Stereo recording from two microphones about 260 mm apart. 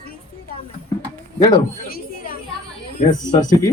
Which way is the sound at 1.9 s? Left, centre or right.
Left.